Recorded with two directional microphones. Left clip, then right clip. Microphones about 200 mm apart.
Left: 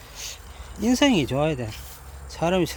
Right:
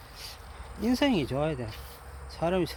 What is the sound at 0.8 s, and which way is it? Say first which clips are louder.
Speech: left 6 dB; 15° left (ahead or behind).